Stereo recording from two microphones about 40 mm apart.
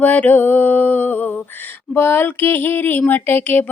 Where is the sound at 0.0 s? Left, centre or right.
Left.